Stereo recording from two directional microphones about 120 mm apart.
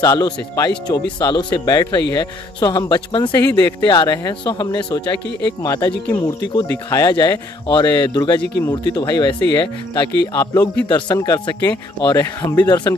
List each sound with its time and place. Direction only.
0.0 s speech: 35° left (ahead or behind)